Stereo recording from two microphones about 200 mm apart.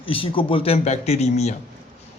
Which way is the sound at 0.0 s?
25° left (ahead or behind).